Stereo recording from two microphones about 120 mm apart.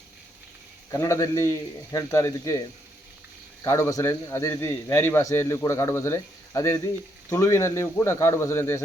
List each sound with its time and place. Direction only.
0.9 s a man's voice: 25° left (ahead or behind)
3.6 s a man's voice: 25° left (ahead or behind)